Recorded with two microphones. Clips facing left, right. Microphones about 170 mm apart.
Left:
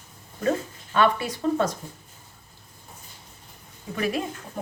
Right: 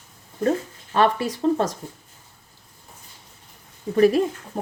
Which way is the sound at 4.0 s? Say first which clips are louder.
Right 10 dB; 35° right (ahead or behind).